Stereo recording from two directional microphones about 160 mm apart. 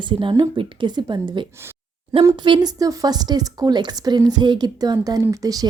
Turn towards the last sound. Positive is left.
turn(degrees=-20)  # may be behind; listen again after turning